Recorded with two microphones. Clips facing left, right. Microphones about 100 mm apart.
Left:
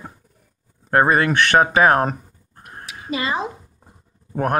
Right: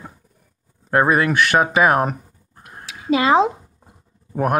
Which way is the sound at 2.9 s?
90° right.